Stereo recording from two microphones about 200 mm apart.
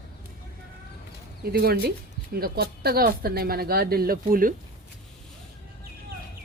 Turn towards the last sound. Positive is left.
turn(degrees=-45)  # may be behind; listen again after turning